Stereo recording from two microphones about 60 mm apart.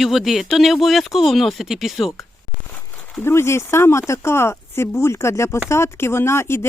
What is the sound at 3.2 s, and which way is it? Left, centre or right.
Speech, left.